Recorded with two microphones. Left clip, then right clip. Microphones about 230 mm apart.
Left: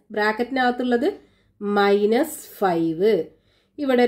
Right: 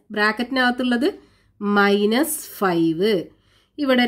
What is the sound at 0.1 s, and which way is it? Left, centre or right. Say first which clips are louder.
A woman's voice: right 1 dB; right.